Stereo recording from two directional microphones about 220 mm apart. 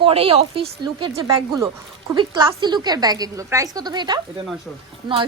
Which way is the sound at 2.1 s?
20° right (ahead or behind).